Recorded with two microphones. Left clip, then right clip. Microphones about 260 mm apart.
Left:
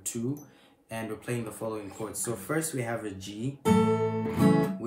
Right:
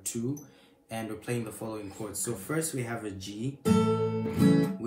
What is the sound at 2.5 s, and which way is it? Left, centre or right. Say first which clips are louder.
Speech: left 2 dB; centre.